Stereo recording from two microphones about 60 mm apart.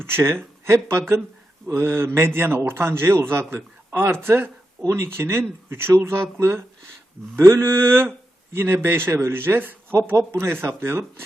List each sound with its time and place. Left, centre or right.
0.6 s a man's voice: right